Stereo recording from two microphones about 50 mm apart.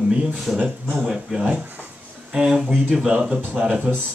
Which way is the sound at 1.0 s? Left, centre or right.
Centre.